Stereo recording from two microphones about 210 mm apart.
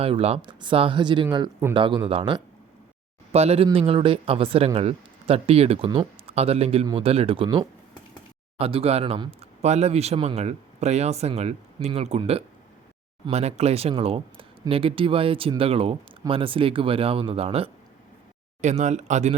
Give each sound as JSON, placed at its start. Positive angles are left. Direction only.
{"t": 0.0, "sound": "speech", "side_deg": -30}